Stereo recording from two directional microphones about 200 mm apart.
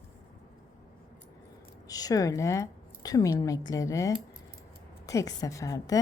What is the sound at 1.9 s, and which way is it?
A woman's voice, 20° left (ahead or behind).